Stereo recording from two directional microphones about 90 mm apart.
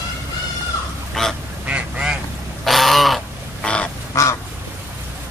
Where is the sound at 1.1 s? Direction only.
5° left (ahead or behind).